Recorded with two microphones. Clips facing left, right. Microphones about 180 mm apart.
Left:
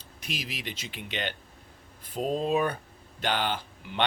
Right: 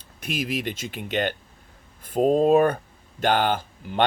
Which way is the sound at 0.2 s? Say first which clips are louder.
Right 10 dB; 50° right (ahead or behind).